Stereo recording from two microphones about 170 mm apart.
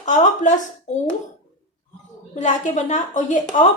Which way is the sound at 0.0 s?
45° left (ahead or behind).